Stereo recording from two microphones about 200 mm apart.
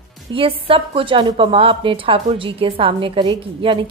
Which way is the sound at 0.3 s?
25° right (ahead or behind).